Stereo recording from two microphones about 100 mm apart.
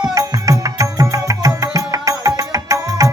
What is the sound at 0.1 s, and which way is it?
Music, 35° right (ahead or behind).